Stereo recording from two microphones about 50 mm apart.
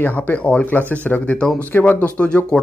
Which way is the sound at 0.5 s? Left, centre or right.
Left.